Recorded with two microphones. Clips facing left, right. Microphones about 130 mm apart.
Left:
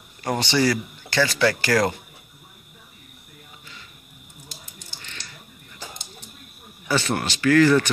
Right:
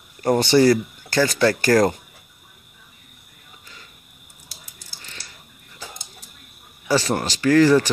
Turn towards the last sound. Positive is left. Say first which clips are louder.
# right 2 dB
turn(degrees=-35)  # may be behind; listen again after turning